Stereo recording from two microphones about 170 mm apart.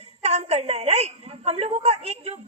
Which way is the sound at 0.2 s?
40° right (ahead or behind).